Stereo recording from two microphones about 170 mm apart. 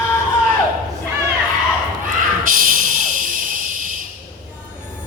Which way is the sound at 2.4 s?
50° right (ahead or behind).